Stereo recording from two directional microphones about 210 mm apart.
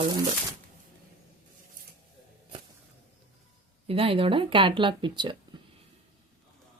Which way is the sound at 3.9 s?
25° right (ahead or behind).